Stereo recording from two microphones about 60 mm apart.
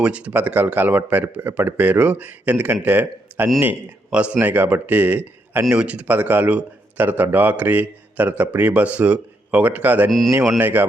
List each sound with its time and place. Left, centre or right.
0.0 s a man's voice: centre
4.1 s a man's voice: right
4.4 s speech: right
5.6 s a man's voice: centre
10.1 s speech: centre
10.6 s speech: right